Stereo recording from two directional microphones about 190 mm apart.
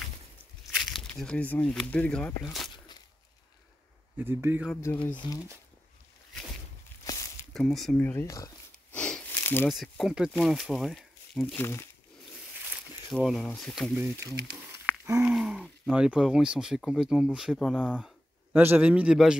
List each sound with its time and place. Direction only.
0.7 s speech: centre (ahead or behind)
4.2 s speech: 10° right (ahead or behind)
4.9 s speech: 10° left (ahead or behind)
7.1 s a sound: 15° left (ahead or behind)
7.5 s speech: centre (ahead or behind)
8.9 s sniff: 5° left (ahead or behind)
9.7 s speech: centre (ahead or behind)
11.6 s speech: 15° left (ahead or behind)
13.1 s speech: centre (ahead or behind)
14.0 s speech: 10° right (ahead or behind)